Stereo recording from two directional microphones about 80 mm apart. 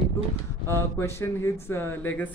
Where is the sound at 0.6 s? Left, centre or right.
Left.